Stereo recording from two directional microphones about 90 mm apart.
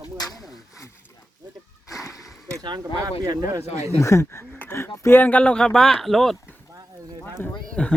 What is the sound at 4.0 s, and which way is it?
Speech, 35° left (ahead or behind).